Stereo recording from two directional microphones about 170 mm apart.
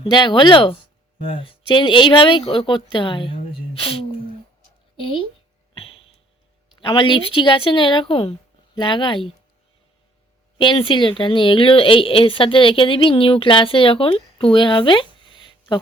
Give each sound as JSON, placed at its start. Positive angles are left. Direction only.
{"t": 0.0, "sound": "a woman's voice", "side_deg": 25}
{"t": 6.7, "sound": "a woman's voice", "side_deg": 30}
{"t": 10.6, "sound": "a woman's voice", "side_deg": 30}